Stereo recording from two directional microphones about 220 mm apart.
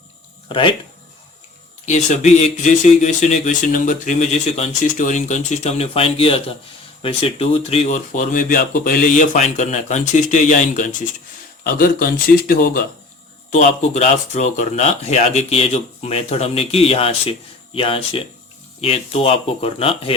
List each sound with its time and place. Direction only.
0.4 s speech: 20° left (ahead or behind)
1.9 s speech: 30° left (ahead or behind)